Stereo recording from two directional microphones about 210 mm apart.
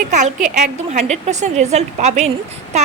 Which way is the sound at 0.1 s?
35° right (ahead or behind).